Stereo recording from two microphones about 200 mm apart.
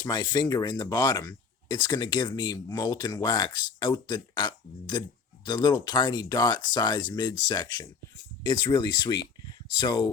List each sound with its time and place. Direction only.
0.0 s speech: 20° left (ahead or behind)